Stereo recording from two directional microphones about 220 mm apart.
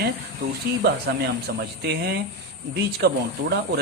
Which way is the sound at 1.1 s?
45° right (ahead or behind).